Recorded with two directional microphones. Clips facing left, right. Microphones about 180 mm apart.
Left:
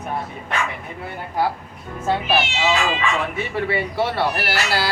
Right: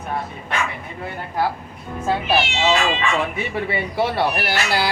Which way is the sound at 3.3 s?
15° right (ahead or behind).